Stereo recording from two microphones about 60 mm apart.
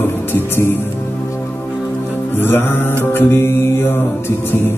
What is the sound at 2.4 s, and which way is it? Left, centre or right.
Music, left.